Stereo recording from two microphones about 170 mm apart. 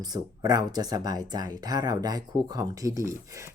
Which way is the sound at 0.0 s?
25° right (ahead or behind).